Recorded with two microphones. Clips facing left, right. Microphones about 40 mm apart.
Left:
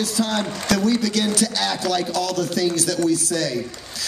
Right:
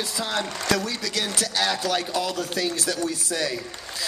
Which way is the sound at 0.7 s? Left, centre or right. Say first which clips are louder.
Left 7 dB; centre.